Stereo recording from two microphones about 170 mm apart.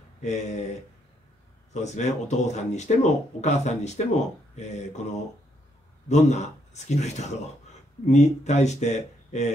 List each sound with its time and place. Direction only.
0.2 s speech: 40° left (ahead or behind)
1.7 s speech: 40° left (ahead or behind)
6.0 s speech: 40° left (ahead or behind)